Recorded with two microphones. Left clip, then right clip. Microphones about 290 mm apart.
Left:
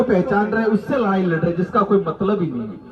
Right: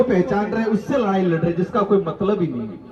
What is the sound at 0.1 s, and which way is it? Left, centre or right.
A man's voice, right.